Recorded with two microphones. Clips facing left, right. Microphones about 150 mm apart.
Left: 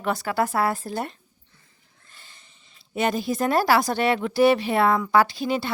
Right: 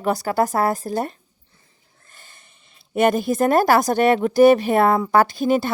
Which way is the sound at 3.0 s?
55° right (ahead or behind).